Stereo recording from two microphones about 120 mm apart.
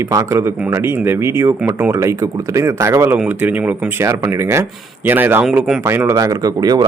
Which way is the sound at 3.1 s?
10° right (ahead or behind).